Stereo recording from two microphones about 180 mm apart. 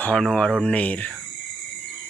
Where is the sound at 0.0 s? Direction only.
5° left (ahead or behind).